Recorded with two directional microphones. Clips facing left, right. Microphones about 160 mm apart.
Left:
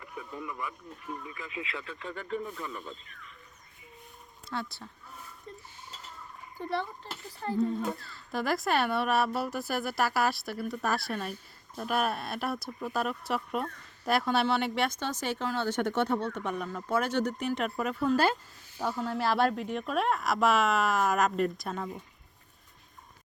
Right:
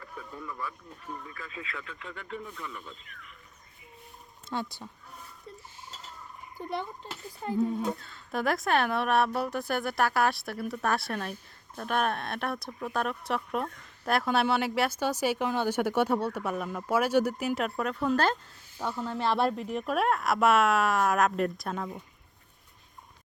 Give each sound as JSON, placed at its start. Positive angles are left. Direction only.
{"t": 0.0, "sound": "a sound", "side_deg": 10}
{"t": 1.2, "sound": "speech", "side_deg": 15}
{"t": 1.7, "sound": "speech", "side_deg": 30}
{"t": 4.4, "sound": "speech", "side_deg": -20}
{"t": 6.6, "sound": "speech", "side_deg": -10}